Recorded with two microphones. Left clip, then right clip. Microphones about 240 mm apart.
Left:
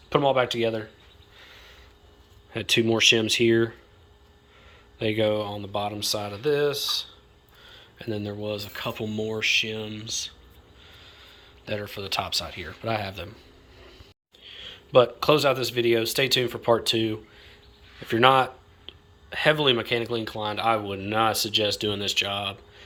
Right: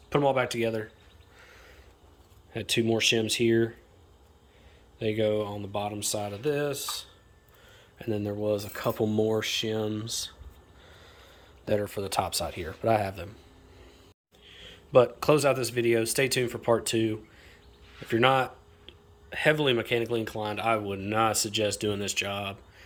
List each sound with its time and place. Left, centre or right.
0.1 s speech: centre
1.4 s a sound: centre
2.5 s speech: centre
4.9 s speech: centre
13.2 s vehicle: centre
14.4 s a man's voice: centre